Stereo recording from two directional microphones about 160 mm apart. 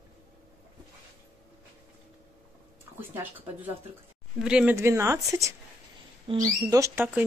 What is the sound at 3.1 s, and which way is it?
Speech, 15° right (ahead or behind).